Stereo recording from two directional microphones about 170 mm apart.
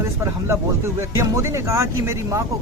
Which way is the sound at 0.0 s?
15° right (ahead or behind).